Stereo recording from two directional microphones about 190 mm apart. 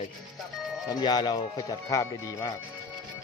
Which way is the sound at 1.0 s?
20° left (ahead or behind).